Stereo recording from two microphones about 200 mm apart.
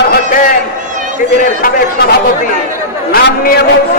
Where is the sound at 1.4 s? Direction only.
45° left (ahead or behind).